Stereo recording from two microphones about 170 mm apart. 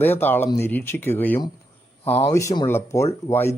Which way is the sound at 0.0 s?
10° left (ahead or behind).